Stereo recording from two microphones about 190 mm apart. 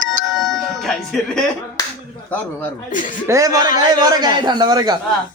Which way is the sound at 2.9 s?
45° left (ahead or behind).